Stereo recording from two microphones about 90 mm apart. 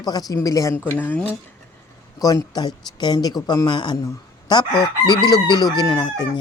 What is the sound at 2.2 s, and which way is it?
Speech, 45° left (ahead or behind).